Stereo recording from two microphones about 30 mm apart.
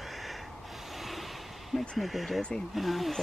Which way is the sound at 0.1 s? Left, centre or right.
Centre.